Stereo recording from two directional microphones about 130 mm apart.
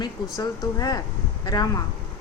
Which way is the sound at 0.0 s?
25° left (ahead or behind).